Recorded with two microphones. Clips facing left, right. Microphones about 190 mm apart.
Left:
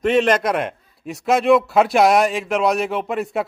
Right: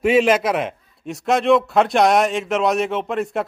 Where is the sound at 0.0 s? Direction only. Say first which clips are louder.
Right 1 dB; 5° right (ahead or behind).